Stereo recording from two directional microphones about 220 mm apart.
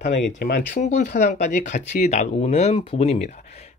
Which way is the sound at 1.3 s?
35° left (ahead or behind).